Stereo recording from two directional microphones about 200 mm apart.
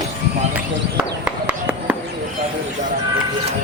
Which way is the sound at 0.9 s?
5° right (ahead or behind).